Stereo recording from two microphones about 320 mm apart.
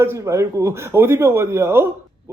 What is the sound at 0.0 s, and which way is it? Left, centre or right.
A man's voice, centre.